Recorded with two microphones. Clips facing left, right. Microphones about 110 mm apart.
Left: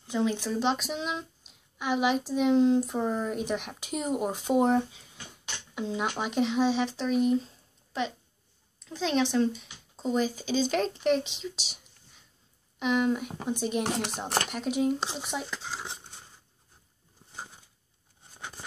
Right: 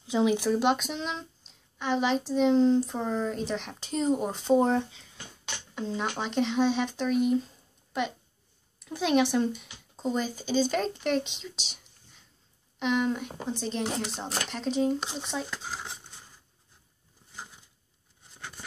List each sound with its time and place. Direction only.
0.0 s speech: 15° right (ahead or behind); by 13.3 s centre (ahead or behind)
13.5 s speech: 10° left (ahead or behind)
13.8 s speech: 60° left (ahead or behind)
14.5 s speech: 10° left (ahead or behind)